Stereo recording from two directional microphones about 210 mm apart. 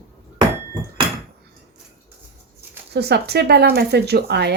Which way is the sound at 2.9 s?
50° right (ahead or behind).